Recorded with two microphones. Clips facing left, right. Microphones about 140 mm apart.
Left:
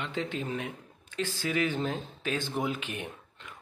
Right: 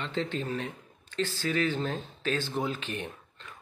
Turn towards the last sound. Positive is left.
turn(degrees=10)  # may be behind; listen again after turning